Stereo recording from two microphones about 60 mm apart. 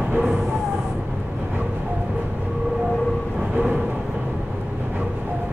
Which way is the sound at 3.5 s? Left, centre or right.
Right.